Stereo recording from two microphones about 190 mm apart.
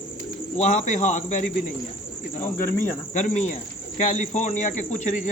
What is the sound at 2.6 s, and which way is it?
Speech, 10° left (ahead or behind).